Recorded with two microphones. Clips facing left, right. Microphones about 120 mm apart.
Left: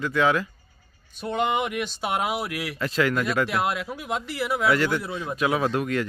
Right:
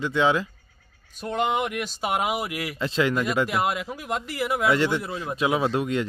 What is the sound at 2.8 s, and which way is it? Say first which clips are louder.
Speech: even; 25° right (ahead or behind).